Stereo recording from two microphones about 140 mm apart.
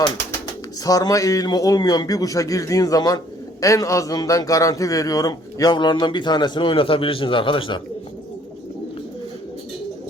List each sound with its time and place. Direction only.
0.9 s a man's voice: 25° left (ahead or behind)